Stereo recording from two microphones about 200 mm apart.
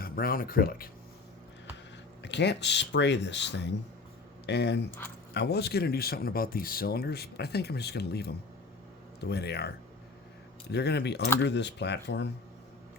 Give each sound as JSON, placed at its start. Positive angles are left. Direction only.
{"t": 0.0, "sound": "speech", "side_deg": 50}
{"t": 2.2, "sound": "speech", "side_deg": 60}